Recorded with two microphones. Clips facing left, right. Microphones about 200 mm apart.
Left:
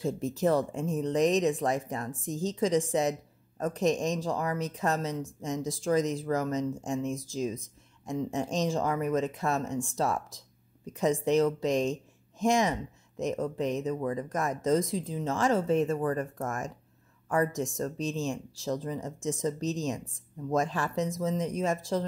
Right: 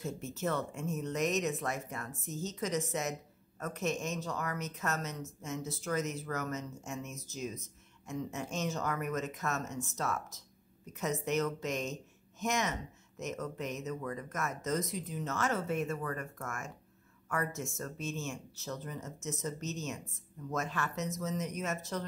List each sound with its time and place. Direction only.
0.0 s speech: 35° left (ahead or behind)